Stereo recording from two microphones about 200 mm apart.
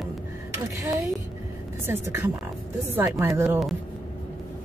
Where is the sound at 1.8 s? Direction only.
10° right (ahead or behind).